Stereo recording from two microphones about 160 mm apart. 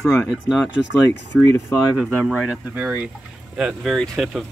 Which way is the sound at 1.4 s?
15° left (ahead or behind).